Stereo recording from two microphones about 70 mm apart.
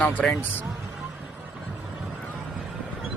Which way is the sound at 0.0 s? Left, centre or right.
Centre.